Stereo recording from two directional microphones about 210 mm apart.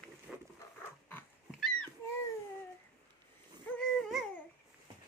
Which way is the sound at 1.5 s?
Centre (ahead or behind).